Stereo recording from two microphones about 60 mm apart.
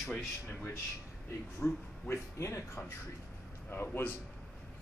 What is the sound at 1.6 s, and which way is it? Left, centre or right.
A man's voice, left.